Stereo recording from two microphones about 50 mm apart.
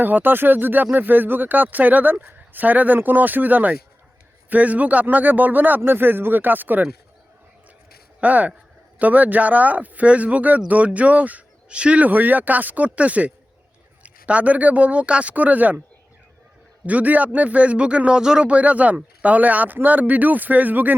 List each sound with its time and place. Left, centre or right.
0.0 s speech: right
8.2 s speech: right
12.0 s speech: right
16.8 s speech: right; by 18.4 s centre
18.4 s speech: right